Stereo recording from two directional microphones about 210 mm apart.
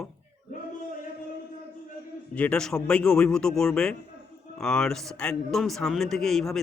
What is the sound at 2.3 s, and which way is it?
A man's voice, 5° left (ahead or behind).